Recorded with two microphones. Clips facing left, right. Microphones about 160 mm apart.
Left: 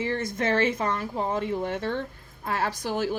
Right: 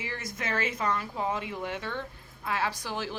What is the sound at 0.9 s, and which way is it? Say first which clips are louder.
A woman's voice: left 3 dB; 40° left (ahead or behind).